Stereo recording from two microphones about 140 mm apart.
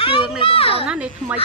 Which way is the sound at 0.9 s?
10° right (ahead or behind).